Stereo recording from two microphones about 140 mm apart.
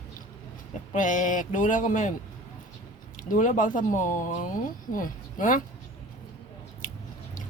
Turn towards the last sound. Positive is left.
turn(degrees=65)  # may be behind; listen again after turning